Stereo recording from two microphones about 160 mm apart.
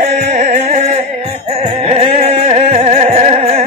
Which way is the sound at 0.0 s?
45° right (ahead or behind).